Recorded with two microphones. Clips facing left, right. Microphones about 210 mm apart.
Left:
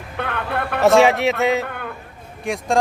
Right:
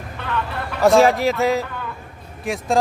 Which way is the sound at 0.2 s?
60° left (ahead or behind).